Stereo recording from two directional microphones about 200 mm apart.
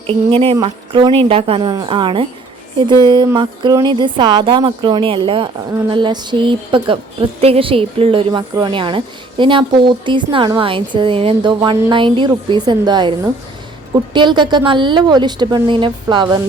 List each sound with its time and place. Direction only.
0.1 s speech: 30° right (ahead or behind)